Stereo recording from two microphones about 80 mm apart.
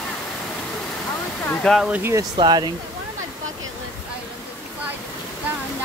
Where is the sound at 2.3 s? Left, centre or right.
Right.